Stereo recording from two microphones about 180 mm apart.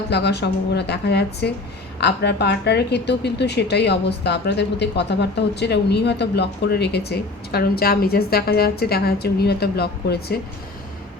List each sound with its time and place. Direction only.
0.1 s a woman's voice: 70° left (ahead or behind)